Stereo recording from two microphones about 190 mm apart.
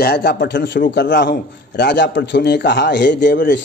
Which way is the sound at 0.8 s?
55° left (ahead or behind).